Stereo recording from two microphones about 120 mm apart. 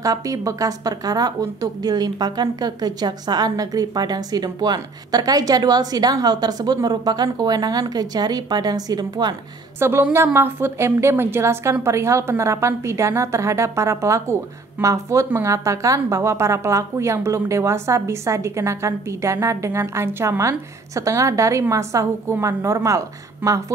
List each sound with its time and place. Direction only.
0.0 s a woman's voice: 30° right (ahead or behind)
9.8 s a woman's voice: 20° right (ahead or behind)